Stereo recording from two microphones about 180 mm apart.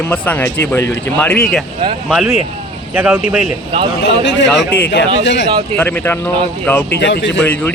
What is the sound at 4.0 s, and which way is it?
Speech, 90° left.